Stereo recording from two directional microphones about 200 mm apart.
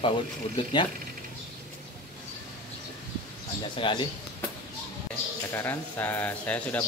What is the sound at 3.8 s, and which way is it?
Speech, 25° left (ahead or behind).